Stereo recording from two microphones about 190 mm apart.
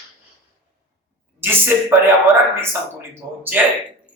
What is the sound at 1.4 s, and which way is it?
Speech, 10° right (ahead or behind).